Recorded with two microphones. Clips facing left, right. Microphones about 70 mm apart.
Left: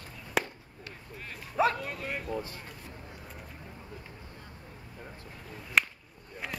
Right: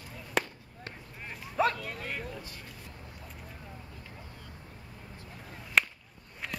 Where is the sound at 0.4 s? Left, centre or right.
Centre.